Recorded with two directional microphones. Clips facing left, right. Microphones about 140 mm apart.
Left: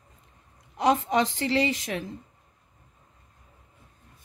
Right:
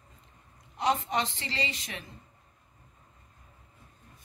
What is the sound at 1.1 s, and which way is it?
Speech, 90° left.